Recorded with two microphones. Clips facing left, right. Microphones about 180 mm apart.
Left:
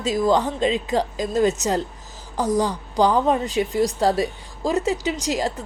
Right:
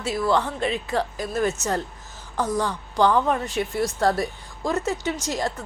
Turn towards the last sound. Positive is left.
turn(degrees=15)  # may be behind; listen again after turning